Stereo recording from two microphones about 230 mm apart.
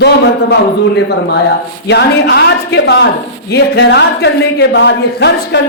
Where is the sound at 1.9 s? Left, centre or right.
Left.